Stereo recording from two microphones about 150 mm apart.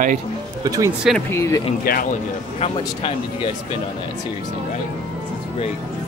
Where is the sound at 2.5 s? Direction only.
40° left (ahead or behind).